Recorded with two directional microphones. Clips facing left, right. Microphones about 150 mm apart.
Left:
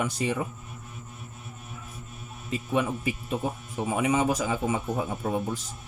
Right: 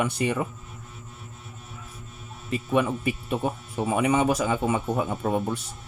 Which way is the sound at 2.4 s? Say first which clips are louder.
Right 3 dB; 65° right (ahead or behind).